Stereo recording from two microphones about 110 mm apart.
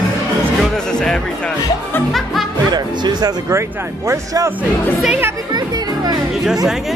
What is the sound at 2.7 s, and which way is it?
Speech, 40° right (ahead or behind).